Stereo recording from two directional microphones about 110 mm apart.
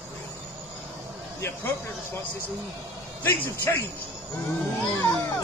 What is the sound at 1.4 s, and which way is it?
Speech, 25° left (ahead or behind).